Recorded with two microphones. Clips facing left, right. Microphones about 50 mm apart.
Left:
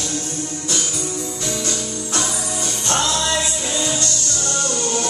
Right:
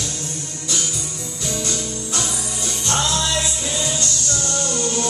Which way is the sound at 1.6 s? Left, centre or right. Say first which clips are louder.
Left 1 dB; left.